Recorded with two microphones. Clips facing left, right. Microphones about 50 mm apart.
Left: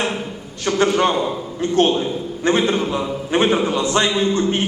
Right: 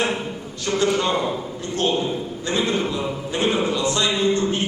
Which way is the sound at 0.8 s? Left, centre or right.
Left.